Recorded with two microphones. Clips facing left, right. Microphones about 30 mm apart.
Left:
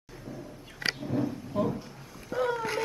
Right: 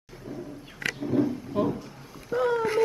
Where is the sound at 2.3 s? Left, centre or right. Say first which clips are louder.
Right 4 dB; centre.